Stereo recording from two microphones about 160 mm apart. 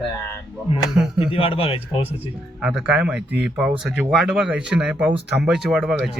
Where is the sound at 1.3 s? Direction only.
35° left (ahead or behind).